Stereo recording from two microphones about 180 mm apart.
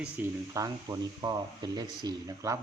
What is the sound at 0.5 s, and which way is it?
Speech, 20° right (ahead or behind).